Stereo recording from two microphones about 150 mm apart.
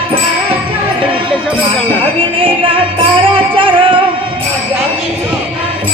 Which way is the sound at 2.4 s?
35° right (ahead or behind).